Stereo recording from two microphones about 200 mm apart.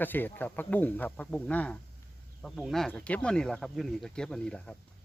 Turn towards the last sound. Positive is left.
turn(degrees=5)  # may be behind; listen again after turning